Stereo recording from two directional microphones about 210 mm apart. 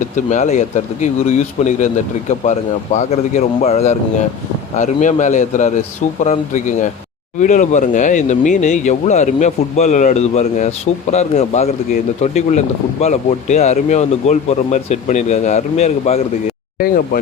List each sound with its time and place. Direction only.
0.3 s speech: 35° left (ahead or behind)